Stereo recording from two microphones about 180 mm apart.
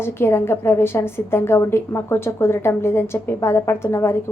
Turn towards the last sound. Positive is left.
turn(degrees=15)  # may be behind; listen again after turning